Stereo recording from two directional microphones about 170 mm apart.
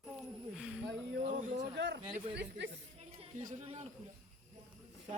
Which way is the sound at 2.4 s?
90° right.